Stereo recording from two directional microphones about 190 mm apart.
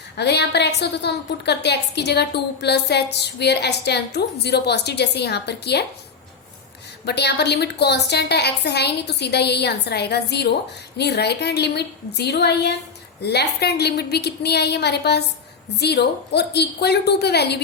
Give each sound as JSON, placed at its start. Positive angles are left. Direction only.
{"t": 0.2, "sound": "a woman's voice", "side_deg": 60}
{"t": 7.0, "sound": "a woman's voice", "side_deg": 60}